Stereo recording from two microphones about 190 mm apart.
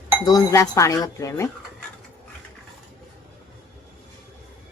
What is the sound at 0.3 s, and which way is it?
Speech, 20° left (ahead or behind).